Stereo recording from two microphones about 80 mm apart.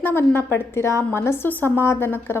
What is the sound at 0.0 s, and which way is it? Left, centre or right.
A woman's voice, left.